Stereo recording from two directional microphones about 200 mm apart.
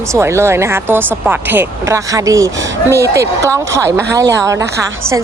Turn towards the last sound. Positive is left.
turn(degrees=-15)  # may be behind; listen again after turning